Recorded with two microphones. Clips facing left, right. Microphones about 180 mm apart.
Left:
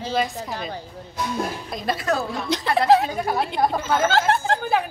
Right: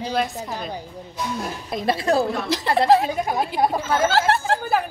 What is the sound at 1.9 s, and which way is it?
Speech, 30° right (ahead or behind).